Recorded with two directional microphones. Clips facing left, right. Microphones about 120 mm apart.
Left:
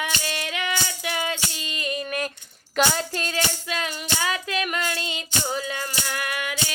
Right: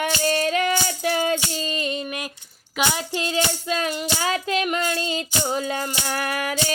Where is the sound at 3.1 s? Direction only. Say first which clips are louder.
Right 4 dB; 20° right (ahead or behind).